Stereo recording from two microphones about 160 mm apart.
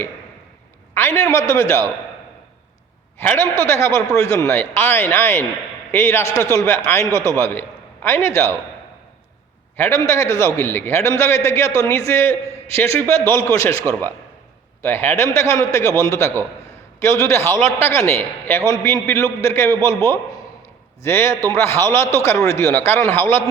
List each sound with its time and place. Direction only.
0.9 s a man's voice: 20° left (ahead or behind)
3.2 s a man's voice: 15° left (ahead or behind)
9.7 s a man's voice: 15° left (ahead or behind)